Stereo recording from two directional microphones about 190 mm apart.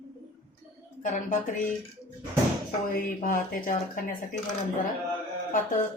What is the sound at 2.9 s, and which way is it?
Speech, 50° left (ahead or behind).